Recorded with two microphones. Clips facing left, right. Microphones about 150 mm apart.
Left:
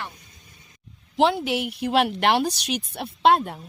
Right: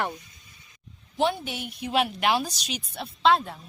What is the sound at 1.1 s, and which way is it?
A woman's voice, 90° left.